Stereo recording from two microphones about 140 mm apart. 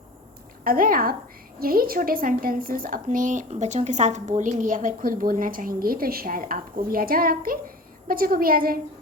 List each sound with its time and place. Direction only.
0.6 s a woman's voice: 90° right